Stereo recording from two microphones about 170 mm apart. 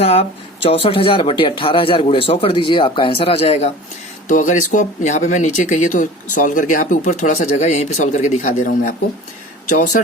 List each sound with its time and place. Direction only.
0.0 s speech: 35° left (ahead or behind)
4.3 s speech: 50° left (ahead or behind)